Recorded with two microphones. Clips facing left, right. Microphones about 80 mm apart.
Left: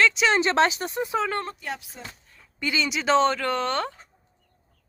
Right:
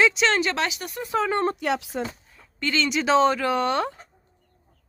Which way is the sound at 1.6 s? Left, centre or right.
Right.